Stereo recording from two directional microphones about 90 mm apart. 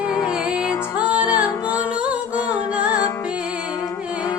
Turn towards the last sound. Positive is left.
turn(degrees=-15)  # may be behind; listen again after turning